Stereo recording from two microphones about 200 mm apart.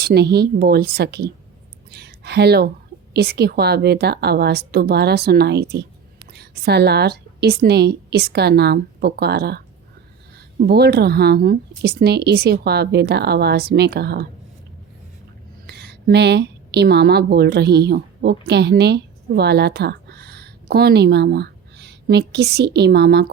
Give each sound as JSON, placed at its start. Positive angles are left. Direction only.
{"t": 0.0, "sound": "a woman's voice", "side_deg": -55}
{"t": 15.6, "sound": "a woman's voice", "side_deg": -55}